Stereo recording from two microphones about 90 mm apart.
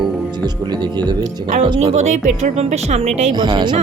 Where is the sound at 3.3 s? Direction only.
55° right (ahead or behind).